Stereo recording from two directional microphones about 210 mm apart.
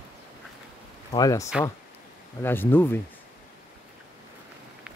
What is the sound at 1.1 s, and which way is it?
Speech, 15° left (ahead or behind).